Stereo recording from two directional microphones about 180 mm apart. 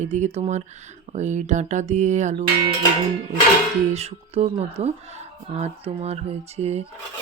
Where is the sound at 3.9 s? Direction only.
35° right (ahead or behind).